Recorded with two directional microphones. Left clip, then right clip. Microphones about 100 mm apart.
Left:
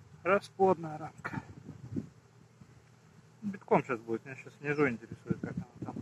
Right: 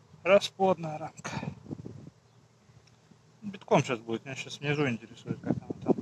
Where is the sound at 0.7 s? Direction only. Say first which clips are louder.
Right 2 dB; 60° right (ahead or behind).